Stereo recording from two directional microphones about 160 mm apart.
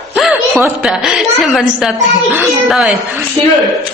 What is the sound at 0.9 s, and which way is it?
A woman's voice, 5° right (ahead or behind).